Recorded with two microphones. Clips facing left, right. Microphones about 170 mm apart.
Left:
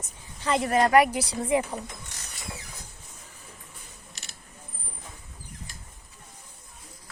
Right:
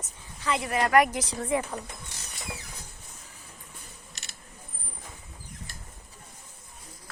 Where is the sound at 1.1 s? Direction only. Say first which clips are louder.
Left 3 dB; 10° left (ahead or behind).